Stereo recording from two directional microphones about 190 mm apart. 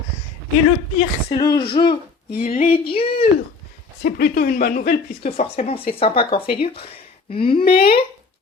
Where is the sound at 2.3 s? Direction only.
45° left (ahead or behind).